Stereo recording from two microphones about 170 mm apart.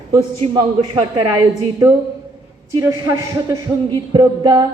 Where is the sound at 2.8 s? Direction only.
20° right (ahead or behind).